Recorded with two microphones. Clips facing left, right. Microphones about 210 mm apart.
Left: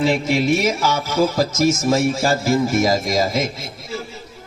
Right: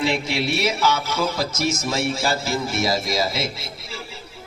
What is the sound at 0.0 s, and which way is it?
A man's voice, 40° left (ahead or behind).